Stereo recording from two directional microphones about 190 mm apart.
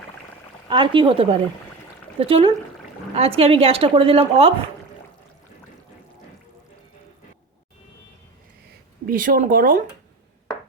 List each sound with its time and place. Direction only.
0.7 s a woman's voice: 25° right (ahead or behind)
9.0 s speech: 45° right (ahead or behind)